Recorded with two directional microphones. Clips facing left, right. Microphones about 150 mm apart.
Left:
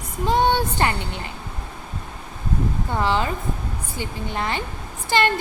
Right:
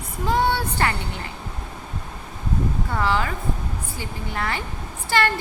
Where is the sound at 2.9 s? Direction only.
20° left (ahead or behind).